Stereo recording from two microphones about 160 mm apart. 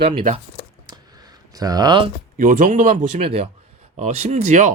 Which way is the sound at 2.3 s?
55° right (ahead or behind).